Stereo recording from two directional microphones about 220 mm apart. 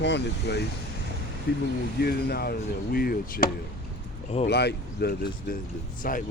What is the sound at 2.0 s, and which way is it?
Speech, 45° left (ahead or behind).